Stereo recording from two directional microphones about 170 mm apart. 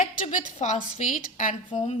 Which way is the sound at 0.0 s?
50° left (ahead or behind).